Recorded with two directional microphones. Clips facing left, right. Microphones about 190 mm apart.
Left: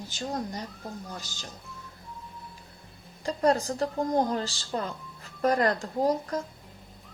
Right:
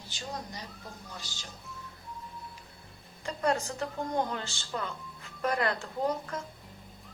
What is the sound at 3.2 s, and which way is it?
A woman's voice, 35° left (ahead or behind).